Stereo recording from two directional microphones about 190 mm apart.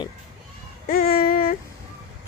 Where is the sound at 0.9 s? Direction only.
50° left (ahead or behind).